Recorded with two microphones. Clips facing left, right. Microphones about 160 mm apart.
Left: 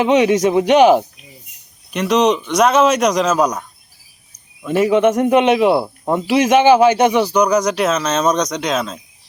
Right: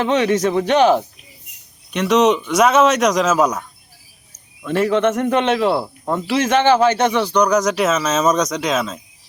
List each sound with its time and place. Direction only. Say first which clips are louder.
0.0 s speech: left 3 dB; 15° left (ahead or behind)
1.9 s a man's voice: even; centre (ahead or behind)
4.6 s speech: left 3 dB; 10° left (ahead or behind)